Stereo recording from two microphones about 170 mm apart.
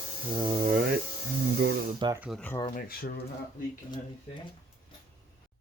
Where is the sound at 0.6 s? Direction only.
60° right (ahead or behind).